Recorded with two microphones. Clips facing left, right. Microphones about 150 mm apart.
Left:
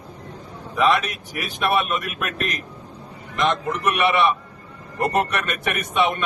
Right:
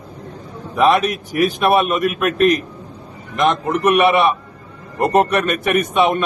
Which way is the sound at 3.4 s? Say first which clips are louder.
Right 6 dB; 50° right (ahead or behind).